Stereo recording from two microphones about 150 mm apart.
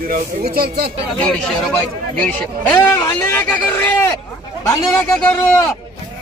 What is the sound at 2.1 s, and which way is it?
A man's voice, 10° left (ahead or behind).